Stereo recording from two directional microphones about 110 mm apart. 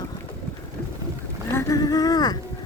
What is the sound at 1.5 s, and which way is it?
Speech, 25° left (ahead or behind).